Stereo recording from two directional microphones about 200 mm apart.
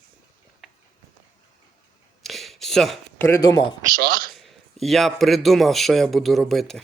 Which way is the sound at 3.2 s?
15° left (ahead or behind).